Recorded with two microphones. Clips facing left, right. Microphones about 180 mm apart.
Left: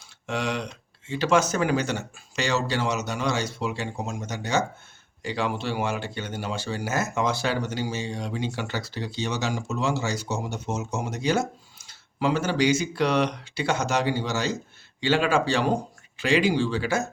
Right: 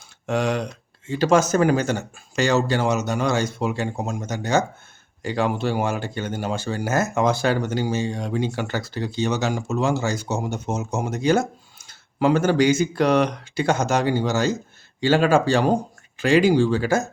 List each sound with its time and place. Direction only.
0.3 s speech: 45° right (ahead or behind)